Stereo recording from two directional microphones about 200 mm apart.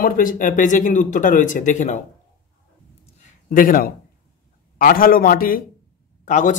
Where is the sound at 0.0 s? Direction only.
45° left (ahead or behind).